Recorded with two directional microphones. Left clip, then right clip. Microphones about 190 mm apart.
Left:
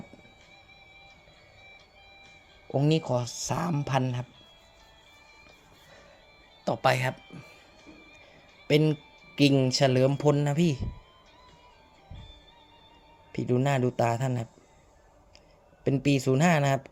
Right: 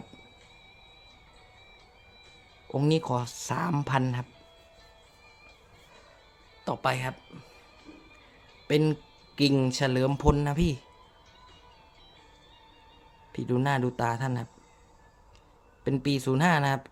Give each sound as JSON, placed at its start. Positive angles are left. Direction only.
{"t": 2.7, "sound": "speech", "side_deg": 0}
{"t": 6.8, "sound": "speech", "side_deg": 20}
{"t": 8.6, "sound": "speech", "side_deg": 0}
{"t": 13.3, "sound": "speech", "side_deg": 5}
{"t": 15.8, "sound": "speech", "side_deg": 5}